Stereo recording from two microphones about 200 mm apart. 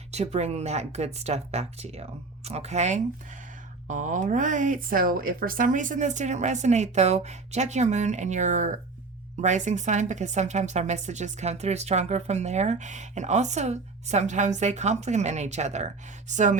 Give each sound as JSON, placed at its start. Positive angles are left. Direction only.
{"t": 0.1, "sound": "a woman's voice", "side_deg": -35}